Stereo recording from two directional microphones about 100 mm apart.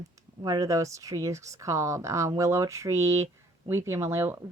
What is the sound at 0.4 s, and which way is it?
Speech, 35° right (ahead or behind).